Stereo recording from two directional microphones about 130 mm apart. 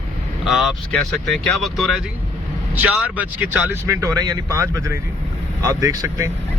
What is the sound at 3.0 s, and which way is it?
Speech, 10° right (ahead or behind).